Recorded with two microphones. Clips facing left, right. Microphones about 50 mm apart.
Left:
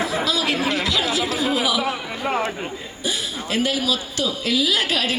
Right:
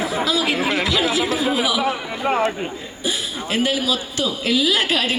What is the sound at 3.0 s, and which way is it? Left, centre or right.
A man's voice, centre.